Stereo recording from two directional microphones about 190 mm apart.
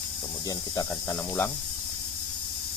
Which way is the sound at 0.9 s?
10° left (ahead or behind).